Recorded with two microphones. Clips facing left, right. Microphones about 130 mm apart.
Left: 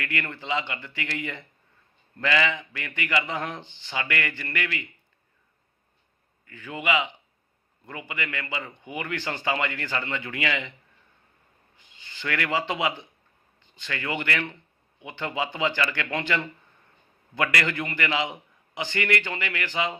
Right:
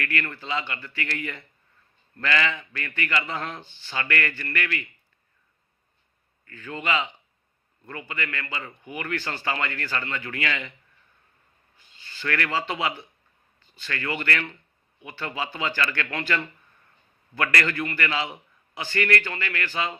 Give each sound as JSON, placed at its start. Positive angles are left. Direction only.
{"t": 0.0, "sound": "a man's voice", "side_deg": 20}
{"t": 6.5, "sound": "a man's voice", "side_deg": 15}
{"t": 11.8, "sound": "a man's voice", "side_deg": 20}